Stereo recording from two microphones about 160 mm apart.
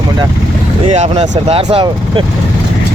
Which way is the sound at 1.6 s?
30° right (ahead or behind).